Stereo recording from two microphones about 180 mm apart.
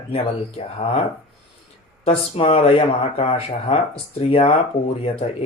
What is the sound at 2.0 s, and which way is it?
Speech, 35° left (ahead or behind).